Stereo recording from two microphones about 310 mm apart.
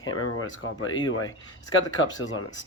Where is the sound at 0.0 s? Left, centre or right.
Left.